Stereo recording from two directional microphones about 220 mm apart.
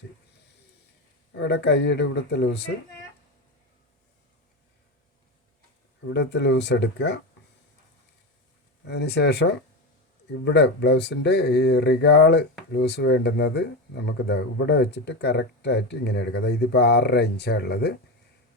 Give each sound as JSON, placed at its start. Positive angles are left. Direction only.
{"t": 1.3, "sound": "speech", "side_deg": 50}
{"t": 6.1, "sound": "speech", "side_deg": 50}
{"t": 8.8, "sound": "speech", "side_deg": 50}